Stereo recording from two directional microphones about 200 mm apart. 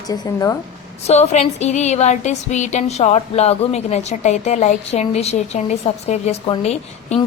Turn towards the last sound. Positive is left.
turn(degrees=30)  # may be behind; listen again after turning